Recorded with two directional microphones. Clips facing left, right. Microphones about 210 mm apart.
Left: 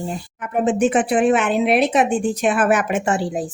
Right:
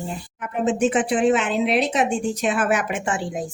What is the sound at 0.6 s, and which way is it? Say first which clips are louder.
A woman's voice: left 2 dB; 60° left (ahead or behind).